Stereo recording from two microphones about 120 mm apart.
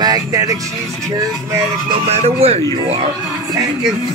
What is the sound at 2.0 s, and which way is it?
Speech, 60° right (ahead or behind).